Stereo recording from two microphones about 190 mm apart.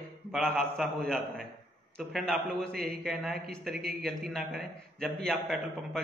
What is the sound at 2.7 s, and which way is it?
Speech, 55° right (ahead or behind).